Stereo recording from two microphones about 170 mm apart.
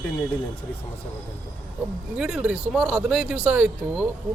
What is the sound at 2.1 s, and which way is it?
Speech, 5° right (ahead or behind).